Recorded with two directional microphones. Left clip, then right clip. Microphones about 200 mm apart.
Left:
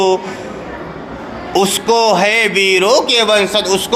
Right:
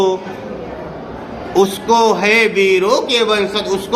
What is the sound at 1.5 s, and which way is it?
A man's voice, 25° left (ahead or behind).